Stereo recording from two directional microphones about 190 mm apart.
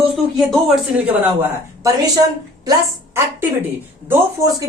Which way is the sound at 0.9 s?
10° right (ahead or behind).